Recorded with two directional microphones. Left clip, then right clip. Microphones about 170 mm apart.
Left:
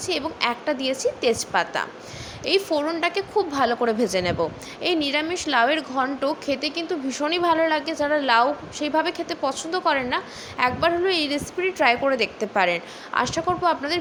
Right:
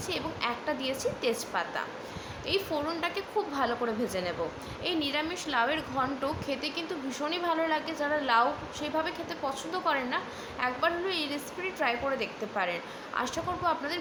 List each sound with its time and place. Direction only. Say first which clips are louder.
0.0 s a woman's voice: left 8 dB; 40° left (ahead or behind)